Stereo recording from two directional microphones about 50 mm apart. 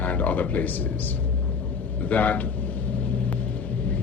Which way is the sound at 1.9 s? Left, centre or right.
Left.